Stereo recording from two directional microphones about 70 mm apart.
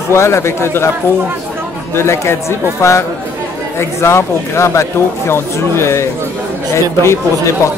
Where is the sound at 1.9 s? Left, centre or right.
Left.